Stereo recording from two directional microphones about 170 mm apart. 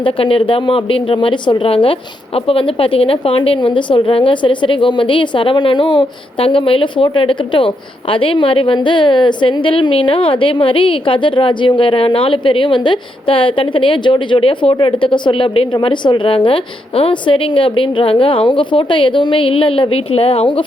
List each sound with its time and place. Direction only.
0.0 s a woman's voice: 30° left (ahead or behind)